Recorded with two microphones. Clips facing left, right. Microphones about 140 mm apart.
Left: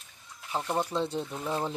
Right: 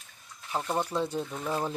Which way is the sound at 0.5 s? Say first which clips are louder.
Even; centre (ahead or behind).